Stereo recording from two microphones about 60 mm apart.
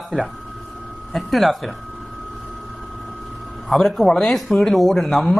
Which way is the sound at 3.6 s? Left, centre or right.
Centre.